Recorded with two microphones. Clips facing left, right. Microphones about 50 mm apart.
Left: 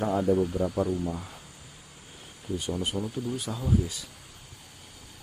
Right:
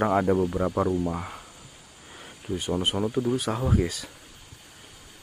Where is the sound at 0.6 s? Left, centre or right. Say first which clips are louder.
Right 3 dB; right.